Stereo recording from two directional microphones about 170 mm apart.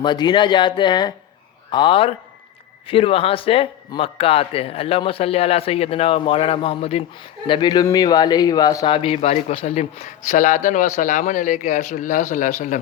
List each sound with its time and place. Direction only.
0.0 s a man's voice: 25° left (ahead or behind)
9.0 s a man's voice: 35° left (ahead or behind)